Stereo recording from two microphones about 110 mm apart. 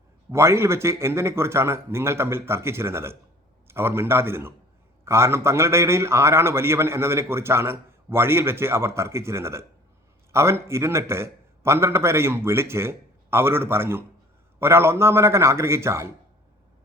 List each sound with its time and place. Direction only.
0.3 s a man's voice: 25° right (ahead or behind)